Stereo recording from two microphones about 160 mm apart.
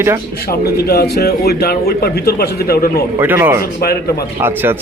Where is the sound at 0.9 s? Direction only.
75° left (ahead or behind).